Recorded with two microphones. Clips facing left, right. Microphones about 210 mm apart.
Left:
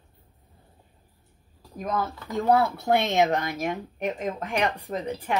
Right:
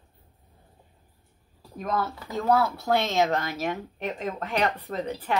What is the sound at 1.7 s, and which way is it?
Speech, 15° left (ahead or behind).